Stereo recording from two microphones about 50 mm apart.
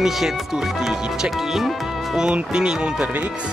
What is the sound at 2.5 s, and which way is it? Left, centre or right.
Speech, centre.